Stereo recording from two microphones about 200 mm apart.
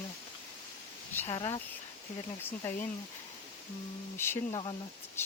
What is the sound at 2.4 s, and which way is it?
Speech, 10° left (ahead or behind).